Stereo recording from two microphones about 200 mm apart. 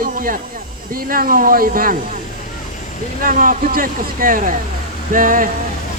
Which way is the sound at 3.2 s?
45° right (ahead or behind).